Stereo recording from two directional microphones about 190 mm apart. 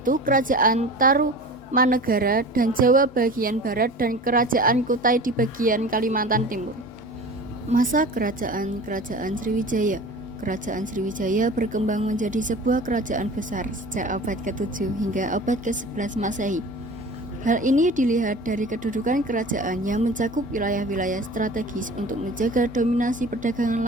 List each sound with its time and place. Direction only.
0.0 s a woman's voice: 45° right (ahead or behind)
7.7 s a woman's voice: 45° right (ahead or behind)